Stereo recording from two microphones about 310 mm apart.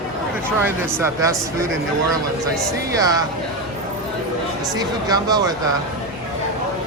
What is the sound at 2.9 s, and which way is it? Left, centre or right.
Speech, centre.